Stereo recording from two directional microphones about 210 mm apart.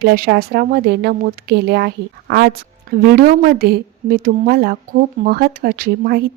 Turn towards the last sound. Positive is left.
turn(degrees=-45)  # may be behind; listen again after turning